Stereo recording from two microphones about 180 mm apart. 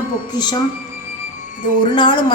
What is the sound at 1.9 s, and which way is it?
Speech, 25° left (ahead or behind).